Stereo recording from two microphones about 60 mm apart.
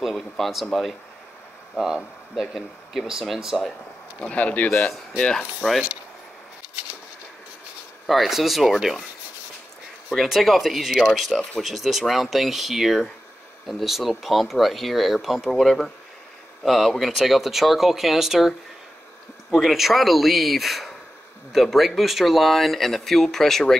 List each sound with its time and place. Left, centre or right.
0.0 s speech: centre
1.8 s speech: centre
4.2 s speech: left
5.6 s speech: centre
8.1 s speech: centre
10.0 s speech: centre
11.2 s speech: centre
11.6 s speech: centre
19.5 s speech: centre